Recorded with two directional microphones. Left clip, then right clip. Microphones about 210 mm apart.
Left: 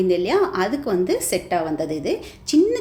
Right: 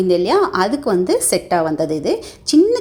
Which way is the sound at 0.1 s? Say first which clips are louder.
Right 4 dB; 25° right (ahead or behind).